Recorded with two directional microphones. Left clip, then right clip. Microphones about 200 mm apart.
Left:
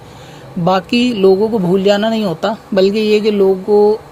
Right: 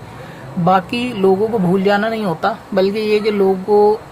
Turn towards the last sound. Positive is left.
turn(degrees=40)  # may be behind; listen again after turning